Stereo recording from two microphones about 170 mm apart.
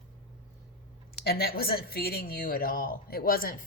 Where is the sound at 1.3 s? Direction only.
65° left (ahead or behind).